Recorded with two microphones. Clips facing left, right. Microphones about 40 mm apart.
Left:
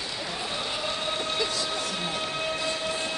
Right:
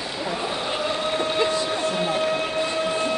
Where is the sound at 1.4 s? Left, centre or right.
Right.